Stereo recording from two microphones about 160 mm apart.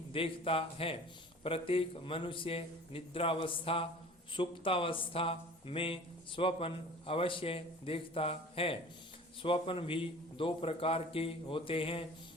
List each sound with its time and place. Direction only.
0.1 s speech: 35° left (ahead or behind)